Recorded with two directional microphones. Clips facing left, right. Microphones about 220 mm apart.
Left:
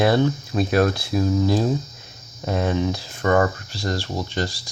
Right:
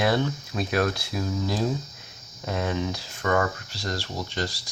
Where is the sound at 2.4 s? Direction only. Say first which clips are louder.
Left 5 dB; 35° left (ahead or behind).